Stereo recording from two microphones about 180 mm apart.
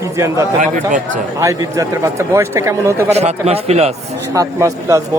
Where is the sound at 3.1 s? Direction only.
35° right (ahead or behind).